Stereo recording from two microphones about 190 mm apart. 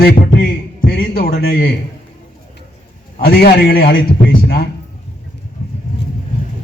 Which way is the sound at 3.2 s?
55° left (ahead or behind).